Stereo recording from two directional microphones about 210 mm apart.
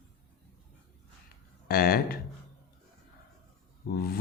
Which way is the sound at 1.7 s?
45° left (ahead or behind).